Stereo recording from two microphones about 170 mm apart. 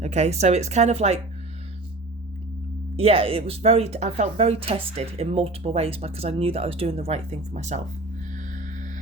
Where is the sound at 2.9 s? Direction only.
35° right (ahead or behind).